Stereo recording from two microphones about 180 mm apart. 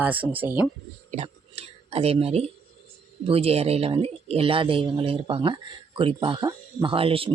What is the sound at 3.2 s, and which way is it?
Speech, 35° right (ahead or behind).